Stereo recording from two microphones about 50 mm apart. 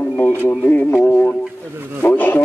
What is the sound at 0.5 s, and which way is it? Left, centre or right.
Speech, left.